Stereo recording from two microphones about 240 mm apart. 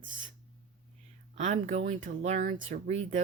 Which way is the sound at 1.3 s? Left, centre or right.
Right.